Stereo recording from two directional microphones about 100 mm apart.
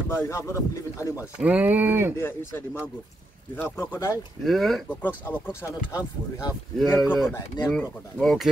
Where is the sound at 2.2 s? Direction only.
20° left (ahead or behind).